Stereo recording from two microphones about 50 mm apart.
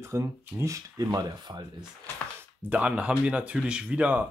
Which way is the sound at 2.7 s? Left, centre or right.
Right.